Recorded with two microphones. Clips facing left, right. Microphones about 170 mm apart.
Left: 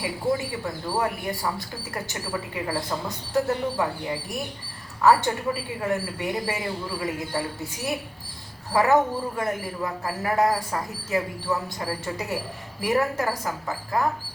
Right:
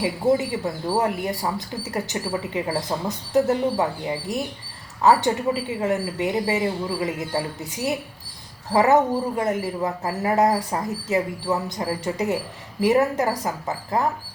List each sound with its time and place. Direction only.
0.0 s speech: 20° right (ahead or behind)
5.0 s speech: 20° right (ahead or behind)